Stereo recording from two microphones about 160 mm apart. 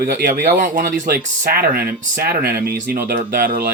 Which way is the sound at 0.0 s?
60° right (ahead or behind).